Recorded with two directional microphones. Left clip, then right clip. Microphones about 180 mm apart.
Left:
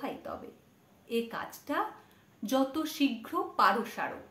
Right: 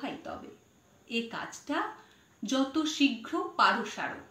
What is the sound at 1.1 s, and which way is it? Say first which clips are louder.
A woman's voice: left 1 dB; 20° left (ahead or behind).